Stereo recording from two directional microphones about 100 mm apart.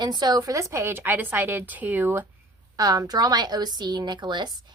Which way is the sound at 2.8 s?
40° right (ahead or behind).